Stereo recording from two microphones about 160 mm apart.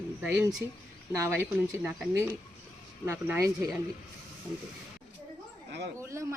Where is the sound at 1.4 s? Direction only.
15° right (ahead or behind).